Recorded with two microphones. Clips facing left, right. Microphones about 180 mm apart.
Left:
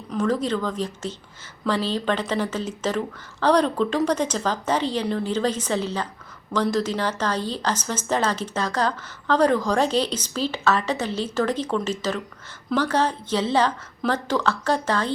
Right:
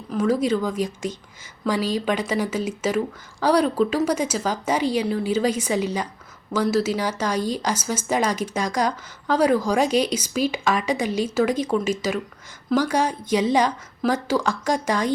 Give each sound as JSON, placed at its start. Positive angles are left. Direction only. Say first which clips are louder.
{"t": 0.1, "sound": "a woman's voice", "louder": "right 2 dB", "side_deg": -10}